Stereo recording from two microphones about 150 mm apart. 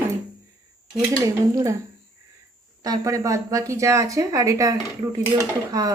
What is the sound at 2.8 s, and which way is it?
Speech, 25° right (ahead or behind).